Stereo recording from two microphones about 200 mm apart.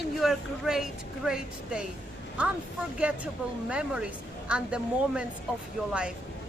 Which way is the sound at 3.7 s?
5° right (ahead or behind).